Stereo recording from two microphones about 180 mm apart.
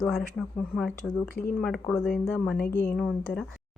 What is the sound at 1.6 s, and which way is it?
A woman's voice, 5° left (ahead or behind).